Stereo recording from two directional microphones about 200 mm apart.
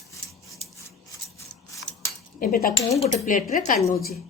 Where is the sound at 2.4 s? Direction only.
45° left (ahead or behind).